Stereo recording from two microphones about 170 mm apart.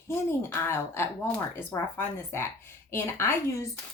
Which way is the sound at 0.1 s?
15° left (ahead or behind).